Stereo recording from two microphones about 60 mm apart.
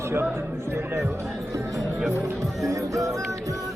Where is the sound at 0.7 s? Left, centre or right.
Right.